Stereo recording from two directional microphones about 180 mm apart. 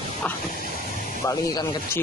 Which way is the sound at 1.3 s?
15° left (ahead or behind).